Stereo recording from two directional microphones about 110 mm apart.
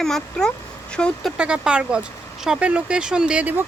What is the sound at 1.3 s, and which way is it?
Speech, 10° right (ahead or behind).